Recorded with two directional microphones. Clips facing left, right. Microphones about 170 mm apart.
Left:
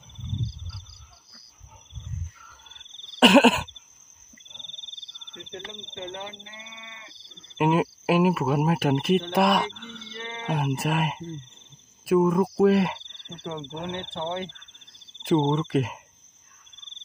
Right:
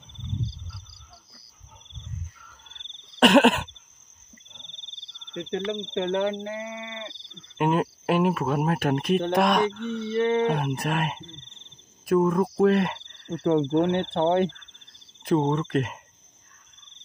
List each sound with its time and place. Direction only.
2.4 s a sound: centre (ahead or behind)
5.3 s speech: 90° right
6.4 s speech: 55° right (ahead or behind); by 7.2 s 70° right (ahead or behind)
7.5 s cricket: 5° left (ahead or behind)
10.1 s speech: 40° right (ahead or behind)
10.4 s cricket: 5° left (ahead or behind)
13.3 s speech: 45° right (ahead or behind)
15.2 s speech: centre (ahead or behind)
15.5 s cricket: 5° left (ahead or behind)